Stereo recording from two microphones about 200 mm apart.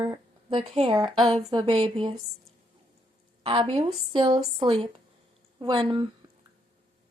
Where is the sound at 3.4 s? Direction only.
30° right (ahead or behind).